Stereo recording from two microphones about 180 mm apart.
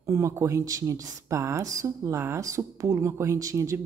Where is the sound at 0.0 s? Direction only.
15° right (ahead or behind).